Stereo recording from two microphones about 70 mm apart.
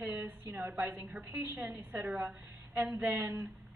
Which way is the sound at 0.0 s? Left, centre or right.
Right.